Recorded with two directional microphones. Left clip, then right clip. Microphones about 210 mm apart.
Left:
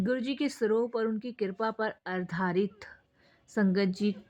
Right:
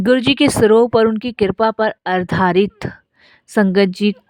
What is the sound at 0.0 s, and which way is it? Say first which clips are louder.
A woman's voice: right 18 dB; 50° right (ahead or behind).